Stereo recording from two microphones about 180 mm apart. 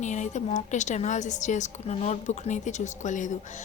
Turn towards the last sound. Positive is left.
turn(degrees=45)  # may be behind; listen again after turning